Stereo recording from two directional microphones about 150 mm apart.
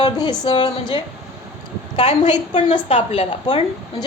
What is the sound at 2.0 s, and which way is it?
A woman's voice, 50° left (ahead or behind).